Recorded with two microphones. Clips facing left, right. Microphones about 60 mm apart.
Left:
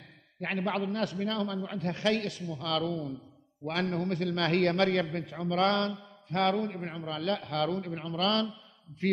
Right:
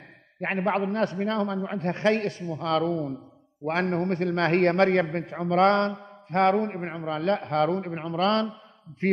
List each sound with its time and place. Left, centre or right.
0.4 s a man's voice: right